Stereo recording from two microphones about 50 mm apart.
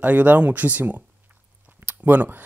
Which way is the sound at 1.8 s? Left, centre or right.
Right.